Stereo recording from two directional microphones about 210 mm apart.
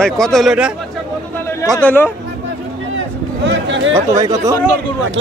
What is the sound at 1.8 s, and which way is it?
Speech, 10° left (ahead or behind).